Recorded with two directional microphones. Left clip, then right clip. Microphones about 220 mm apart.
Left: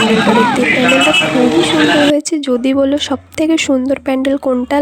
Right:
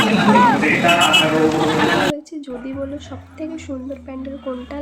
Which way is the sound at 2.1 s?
40° left (ahead or behind).